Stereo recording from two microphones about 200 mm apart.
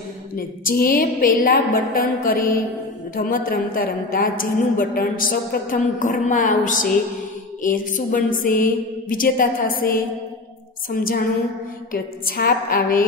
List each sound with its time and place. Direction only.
0.4 s a woman's voice: 45° left (ahead or behind)